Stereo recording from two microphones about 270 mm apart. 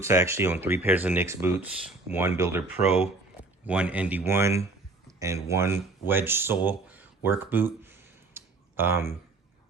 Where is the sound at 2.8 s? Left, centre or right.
Left.